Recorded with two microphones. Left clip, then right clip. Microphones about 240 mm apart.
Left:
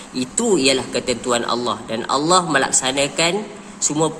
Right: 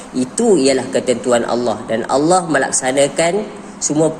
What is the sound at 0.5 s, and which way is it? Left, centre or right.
A man's voice, centre.